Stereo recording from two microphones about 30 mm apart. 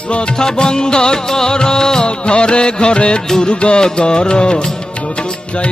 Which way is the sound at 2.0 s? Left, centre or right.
Left.